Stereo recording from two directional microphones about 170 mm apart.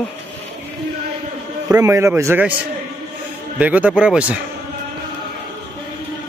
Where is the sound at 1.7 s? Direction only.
15° right (ahead or behind).